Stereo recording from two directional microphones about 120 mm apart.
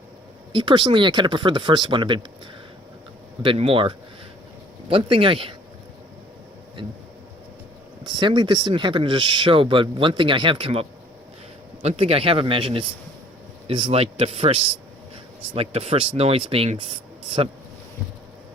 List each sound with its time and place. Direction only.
0.5 s speech: 45° right (ahead or behind)
3.4 s speech: 50° right (ahead or behind)
6.8 s speech: 45° right (ahead or behind)
8.0 s speech: 40° right (ahead or behind)
13.9 s a man's voice: 55° right (ahead or behind)